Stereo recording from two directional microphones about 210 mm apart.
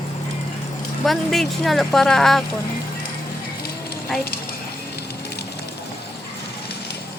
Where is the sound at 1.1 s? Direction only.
Centre (ahead or behind).